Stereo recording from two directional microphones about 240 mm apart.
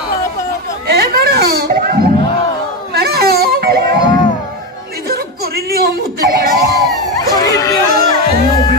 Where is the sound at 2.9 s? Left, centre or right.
Right.